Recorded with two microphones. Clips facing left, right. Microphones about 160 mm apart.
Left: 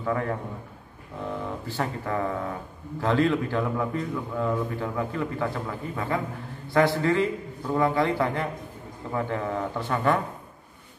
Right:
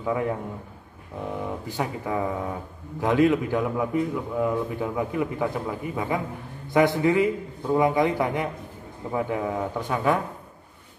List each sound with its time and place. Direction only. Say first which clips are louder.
0.0 s a man's voice: right 2 dB; 15° right (ahead or behind)